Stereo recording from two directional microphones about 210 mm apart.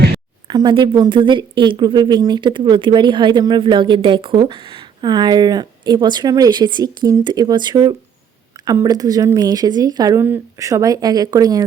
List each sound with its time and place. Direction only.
0.4 s speech: 20° right (ahead or behind)